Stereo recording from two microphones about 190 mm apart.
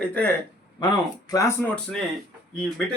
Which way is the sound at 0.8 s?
20° left (ahead or behind).